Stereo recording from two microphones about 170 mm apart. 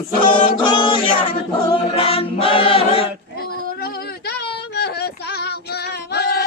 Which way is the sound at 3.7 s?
70° left (ahead or behind).